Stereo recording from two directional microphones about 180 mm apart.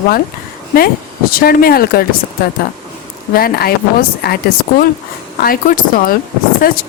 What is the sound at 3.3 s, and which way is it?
Speech, 55° left (ahead or behind).